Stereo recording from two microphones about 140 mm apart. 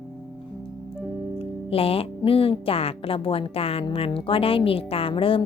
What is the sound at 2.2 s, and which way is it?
A woman's voice, 40° left (ahead or behind).